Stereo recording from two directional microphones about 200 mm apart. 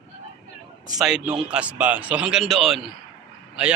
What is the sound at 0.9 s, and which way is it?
A man's voice, 5° right (ahead or behind).